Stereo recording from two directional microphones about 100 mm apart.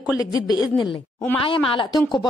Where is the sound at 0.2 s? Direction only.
40° left (ahead or behind).